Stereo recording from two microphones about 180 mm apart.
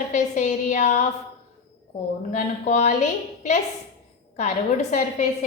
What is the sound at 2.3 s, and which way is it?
A woman's voice, 40° left (ahead or behind).